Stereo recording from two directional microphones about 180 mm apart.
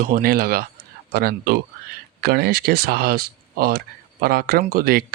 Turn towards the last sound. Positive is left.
turn(degrees=-55)  # may be behind; listen again after turning